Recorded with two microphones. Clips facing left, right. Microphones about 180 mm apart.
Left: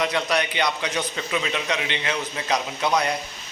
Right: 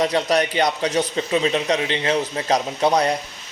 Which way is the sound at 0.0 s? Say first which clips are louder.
Right 5 dB; 35° right (ahead or behind).